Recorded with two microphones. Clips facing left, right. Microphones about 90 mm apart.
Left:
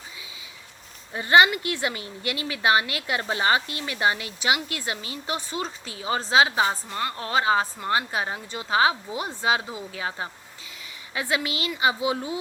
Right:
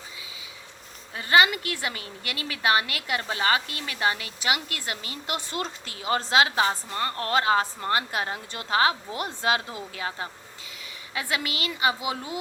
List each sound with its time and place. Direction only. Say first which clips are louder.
1.1 s speech: left 3 dB; 25° left (ahead or behind)